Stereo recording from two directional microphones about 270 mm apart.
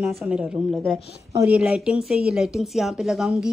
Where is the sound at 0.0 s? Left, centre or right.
Centre.